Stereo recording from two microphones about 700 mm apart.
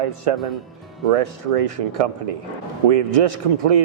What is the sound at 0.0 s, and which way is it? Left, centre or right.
Speech, right.